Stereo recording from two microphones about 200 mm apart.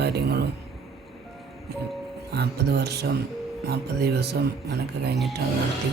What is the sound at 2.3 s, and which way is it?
Speech, 55° right (ahead or behind).